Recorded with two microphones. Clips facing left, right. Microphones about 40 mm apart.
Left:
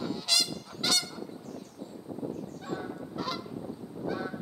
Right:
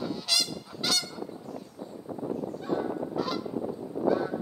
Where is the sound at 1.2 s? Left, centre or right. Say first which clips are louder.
Right 3 dB; centre.